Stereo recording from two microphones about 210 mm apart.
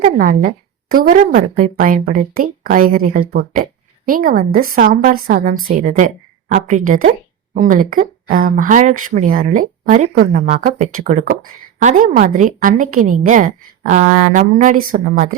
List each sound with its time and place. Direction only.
0.0 s a woman's voice: 40° right (ahead or behind)